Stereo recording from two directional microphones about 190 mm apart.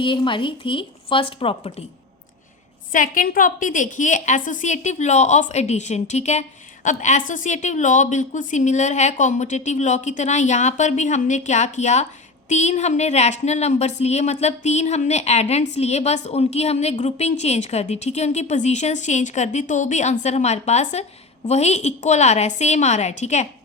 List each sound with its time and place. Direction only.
0.0 s speech: 25° left (ahead or behind)
2.9 s a woman's voice: 45° left (ahead or behind)